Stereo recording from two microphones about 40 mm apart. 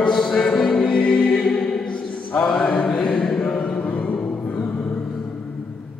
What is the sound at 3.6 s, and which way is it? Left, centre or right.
Music, left.